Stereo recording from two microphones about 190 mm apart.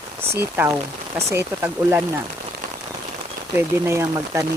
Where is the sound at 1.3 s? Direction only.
10° right (ahead or behind).